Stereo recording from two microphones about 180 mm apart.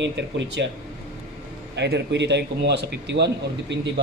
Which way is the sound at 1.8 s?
75° right (ahead or behind).